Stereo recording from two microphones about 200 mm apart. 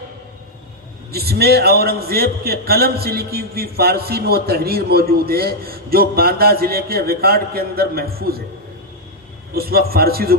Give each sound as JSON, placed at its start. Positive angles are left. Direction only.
{"t": 1.1, "sound": "a man's voice", "side_deg": -50}
{"t": 9.6, "sound": "a man's voice", "side_deg": -50}